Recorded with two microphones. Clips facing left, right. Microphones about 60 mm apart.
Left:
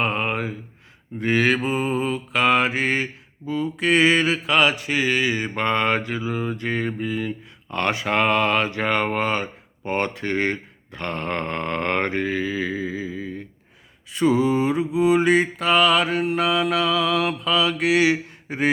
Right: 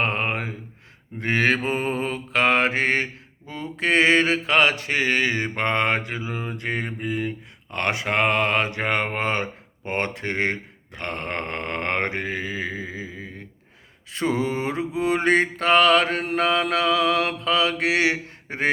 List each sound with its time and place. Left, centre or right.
0.0 s a sound: right
1.2 s mantra: right
14.1 s mantra: right
17.5 s mantra: right